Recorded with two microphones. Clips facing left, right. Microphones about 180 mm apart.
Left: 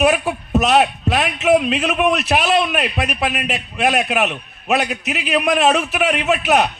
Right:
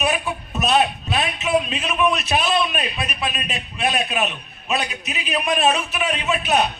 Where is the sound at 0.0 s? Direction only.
80° left.